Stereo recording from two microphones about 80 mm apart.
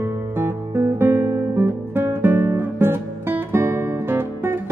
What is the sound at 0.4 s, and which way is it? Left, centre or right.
Guitar, right.